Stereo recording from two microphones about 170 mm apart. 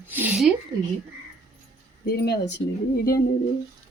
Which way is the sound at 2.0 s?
70° left (ahead or behind).